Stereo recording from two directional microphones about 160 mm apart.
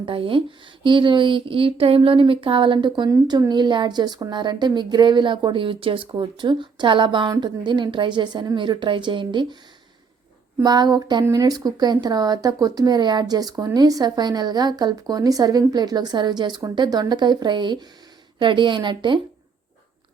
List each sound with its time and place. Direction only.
0.0 s speech: 35° right (ahead or behind)
10.6 s speech: 25° right (ahead or behind)